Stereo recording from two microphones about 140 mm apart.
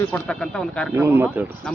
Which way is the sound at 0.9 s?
15° right (ahead or behind).